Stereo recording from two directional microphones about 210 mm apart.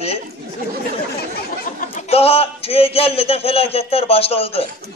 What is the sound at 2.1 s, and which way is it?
A man's voice, 30° left (ahead or behind).